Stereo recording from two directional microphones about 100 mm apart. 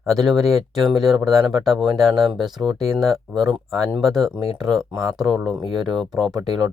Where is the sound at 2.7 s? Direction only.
40° right (ahead or behind).